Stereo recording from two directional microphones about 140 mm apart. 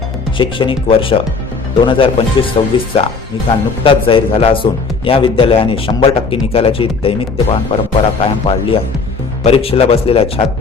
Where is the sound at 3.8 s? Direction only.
40° left (ahead or behind).